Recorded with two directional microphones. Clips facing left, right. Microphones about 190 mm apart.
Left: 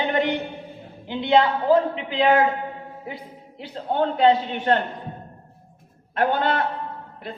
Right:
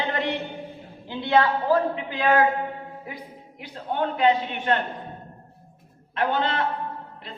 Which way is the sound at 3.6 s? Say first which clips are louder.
Left 4 dB; 30° left (ahead or behind).